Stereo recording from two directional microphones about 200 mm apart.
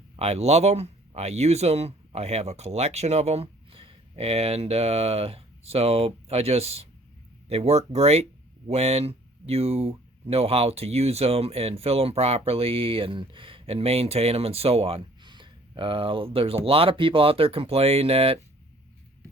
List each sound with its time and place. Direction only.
0.2 s speech: 30° right (ahead or behind)